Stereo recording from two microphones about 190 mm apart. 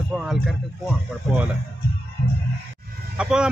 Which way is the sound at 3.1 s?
5° right (ahead or behind).